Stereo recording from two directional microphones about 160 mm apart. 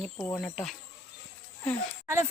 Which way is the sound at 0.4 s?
Centre (ahead or behind).